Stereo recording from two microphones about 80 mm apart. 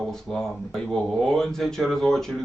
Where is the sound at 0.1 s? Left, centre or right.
Centre.